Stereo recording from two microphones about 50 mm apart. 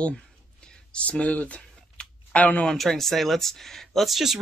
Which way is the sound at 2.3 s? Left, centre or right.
Left.